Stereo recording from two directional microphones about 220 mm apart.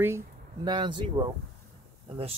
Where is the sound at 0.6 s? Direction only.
20° right (ahead or behind).